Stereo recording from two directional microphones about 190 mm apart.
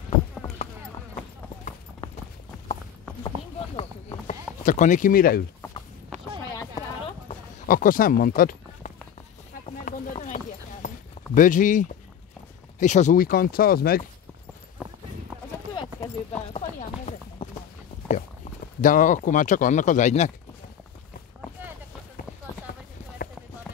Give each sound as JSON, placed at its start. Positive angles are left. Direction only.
{"t": 3.5, "sound": "clip-clop", "side_deg": 30}
{"t": 4.6, "sound": "speech", "side_deg": 40}
{"t": 6.5, "sound": "clip-clop", "side_deg": 20}
{"t": 7.6, "sound": "speech", "side_deg": 45}
{"t": 9.7, "sound": "a sound", "side_deg": 35}
{"t": 11.3, "sound": "speech", "side_deg": 45}
{"t": 15.7, "sound": "clip-clop", "side_deg": 25}
{"t": 16.5, "sound": "chopping", "side_deg": 30}
{"t": 18.0, "sound": "speech", "side_deg": 40}